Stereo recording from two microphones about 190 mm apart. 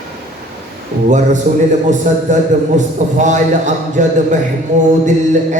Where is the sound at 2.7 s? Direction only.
40° right (ahead or behind).